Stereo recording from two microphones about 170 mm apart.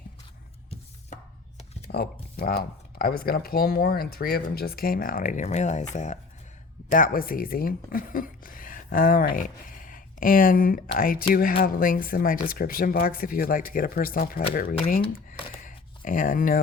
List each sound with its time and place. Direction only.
0.7 s chopping: 40° left (ahead or behind)
1.9 s speech: 65° left (ahead or behind)